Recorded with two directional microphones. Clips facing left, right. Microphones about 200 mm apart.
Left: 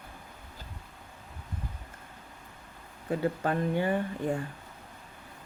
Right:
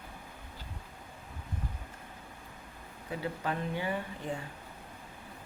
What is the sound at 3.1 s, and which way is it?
Speech, 50° left (ahead or behind).